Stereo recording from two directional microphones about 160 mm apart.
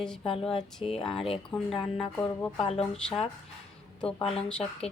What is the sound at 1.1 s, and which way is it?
Speech, 35° left (ahead or behind).